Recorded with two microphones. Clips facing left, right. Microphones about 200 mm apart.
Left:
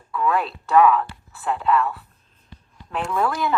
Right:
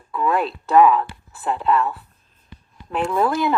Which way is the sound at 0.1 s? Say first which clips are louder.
Right 1 dB; 35° right (ahead or behind).